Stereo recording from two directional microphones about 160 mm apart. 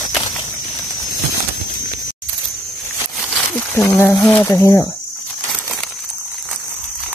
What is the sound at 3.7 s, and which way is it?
Speech, 15° left (ahead or behind).